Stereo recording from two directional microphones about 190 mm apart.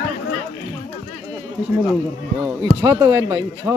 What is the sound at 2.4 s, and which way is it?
Speech, 15° right (ahead or behind).